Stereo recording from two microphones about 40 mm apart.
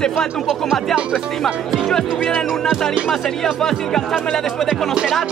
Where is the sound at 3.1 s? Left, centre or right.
Centre.